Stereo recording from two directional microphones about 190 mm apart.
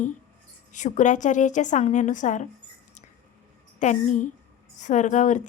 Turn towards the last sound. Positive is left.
turn(degrees=40)  # may be behind; listen again after turning